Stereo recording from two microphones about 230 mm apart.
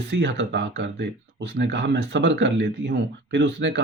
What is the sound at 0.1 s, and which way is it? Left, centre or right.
Speech, right.